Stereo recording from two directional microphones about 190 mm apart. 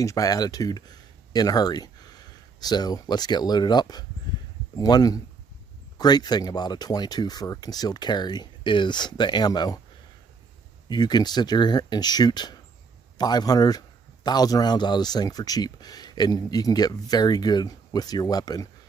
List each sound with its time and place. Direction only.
0.0 s a man's voice: 20° left (ahead or behind)
10.9 s a man's voice: 20° left (ahead or behind)